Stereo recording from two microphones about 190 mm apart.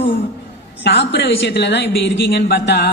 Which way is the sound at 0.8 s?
65° left (ahead or behind).